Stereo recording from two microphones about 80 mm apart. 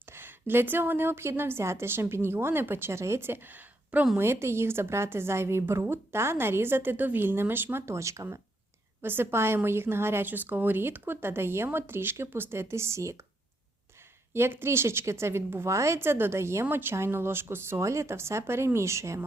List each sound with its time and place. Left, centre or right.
0.0 s a woman's voice: right
4.2 s a woman's voice: right
9.0 s a woman's voice: right
14.3 s speech: right